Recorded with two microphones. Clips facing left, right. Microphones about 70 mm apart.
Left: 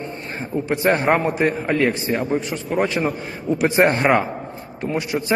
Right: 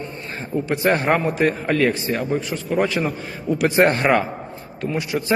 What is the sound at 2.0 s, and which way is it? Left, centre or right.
A man's voice, left.